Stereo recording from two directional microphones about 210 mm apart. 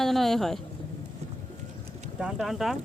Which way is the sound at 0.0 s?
Centre (ahead or behind).